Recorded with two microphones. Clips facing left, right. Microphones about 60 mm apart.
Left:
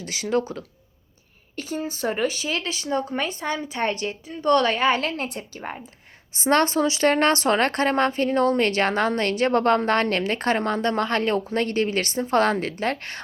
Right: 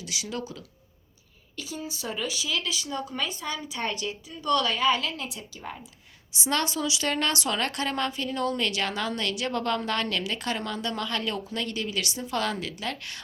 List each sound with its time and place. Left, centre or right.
0.0 s speech: left